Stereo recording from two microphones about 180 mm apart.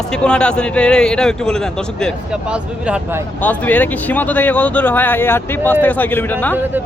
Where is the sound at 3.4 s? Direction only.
10° left (ahead or behind).